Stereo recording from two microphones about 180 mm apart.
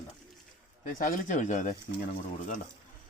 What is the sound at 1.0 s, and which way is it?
Speech, 50° left (ahead or behind).